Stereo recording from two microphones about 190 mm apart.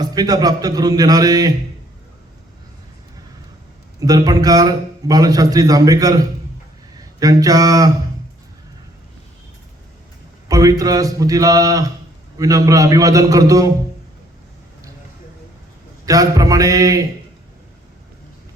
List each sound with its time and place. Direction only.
0.0 s a man's voice: 20° right (ahead or behind)
4.0 s a man's voice: 20° right (ahead or behind)
10.5 s a man's voice: 20° right (ahead or behind)
16.0 s a man's voice: 20° right (ahead or behind)